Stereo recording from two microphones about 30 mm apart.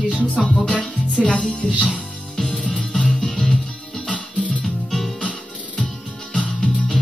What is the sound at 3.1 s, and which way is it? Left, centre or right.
Music, centre.